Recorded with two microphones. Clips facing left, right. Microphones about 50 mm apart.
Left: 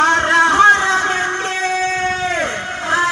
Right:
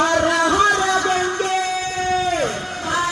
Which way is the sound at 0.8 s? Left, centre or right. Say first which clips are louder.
Left 2 dB; left.